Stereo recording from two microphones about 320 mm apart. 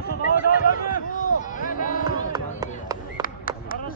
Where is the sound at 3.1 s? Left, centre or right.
Left.